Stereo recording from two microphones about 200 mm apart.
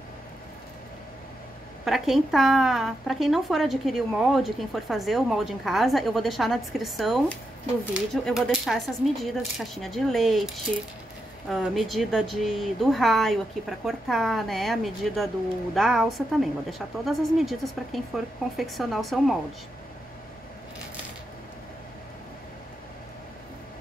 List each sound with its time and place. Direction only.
1.9 s speech: centre (ahead or behind)